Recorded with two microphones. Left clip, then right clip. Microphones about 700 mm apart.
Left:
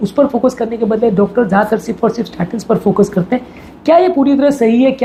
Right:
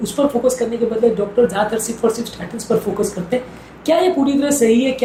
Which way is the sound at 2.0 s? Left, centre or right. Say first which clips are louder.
Left 3 dB; left.